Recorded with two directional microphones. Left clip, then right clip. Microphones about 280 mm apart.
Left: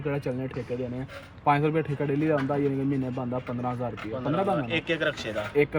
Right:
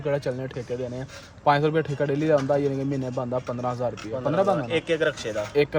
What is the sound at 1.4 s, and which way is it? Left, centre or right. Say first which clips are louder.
Speech: right 3 dB; centre.